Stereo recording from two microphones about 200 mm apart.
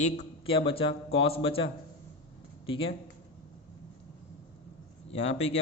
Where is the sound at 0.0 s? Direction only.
30° left (ahead or behind).